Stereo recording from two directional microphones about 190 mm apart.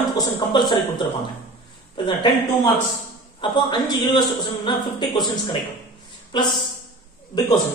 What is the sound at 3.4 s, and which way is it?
A man's voice, 25° left (ahead or behind).